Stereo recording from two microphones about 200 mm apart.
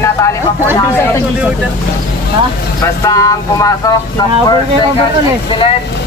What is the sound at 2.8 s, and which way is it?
Speech, 15° left (ahead or behind).